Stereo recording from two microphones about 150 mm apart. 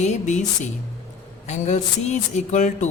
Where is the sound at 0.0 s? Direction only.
50° left (ahead or behind).